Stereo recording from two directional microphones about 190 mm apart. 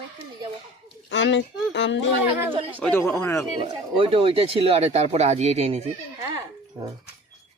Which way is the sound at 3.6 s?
30° right (ahead or behind).